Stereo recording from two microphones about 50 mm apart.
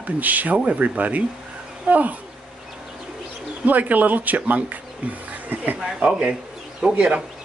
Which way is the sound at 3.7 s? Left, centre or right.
Right.